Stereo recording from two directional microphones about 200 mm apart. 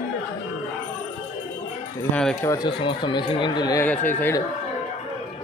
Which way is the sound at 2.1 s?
5° left (ahead or behind).